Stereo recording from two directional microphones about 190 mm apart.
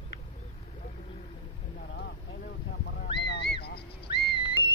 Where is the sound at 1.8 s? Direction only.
65° left (ahead or behind).